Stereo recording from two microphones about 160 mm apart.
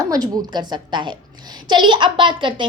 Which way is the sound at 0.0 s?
25° right (ahead or behind).